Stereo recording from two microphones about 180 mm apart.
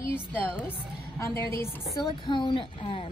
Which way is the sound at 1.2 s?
15° left (ahead or behind).